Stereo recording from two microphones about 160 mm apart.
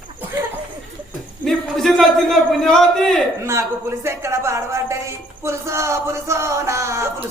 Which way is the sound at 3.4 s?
15° right (ahead or behind).